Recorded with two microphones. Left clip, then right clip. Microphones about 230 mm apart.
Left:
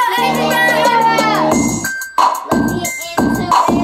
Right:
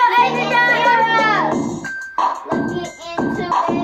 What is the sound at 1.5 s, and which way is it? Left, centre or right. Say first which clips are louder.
Music: left 6 dB; left.